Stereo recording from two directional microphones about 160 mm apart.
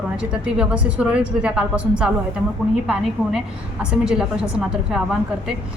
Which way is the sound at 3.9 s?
5° right (ahead or behind).